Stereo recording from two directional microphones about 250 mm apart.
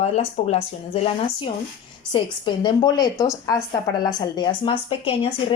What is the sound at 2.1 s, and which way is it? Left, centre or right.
A woman's voice, centre.